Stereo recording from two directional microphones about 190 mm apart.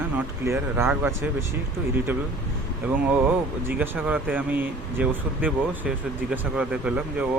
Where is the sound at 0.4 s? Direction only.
15° right (ahead or behind).